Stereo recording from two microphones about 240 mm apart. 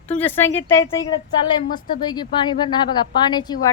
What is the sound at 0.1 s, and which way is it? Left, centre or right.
A woman's voice, centre.